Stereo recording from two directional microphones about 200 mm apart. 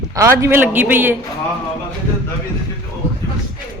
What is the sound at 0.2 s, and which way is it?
Speech, 15° right (ahead or behind).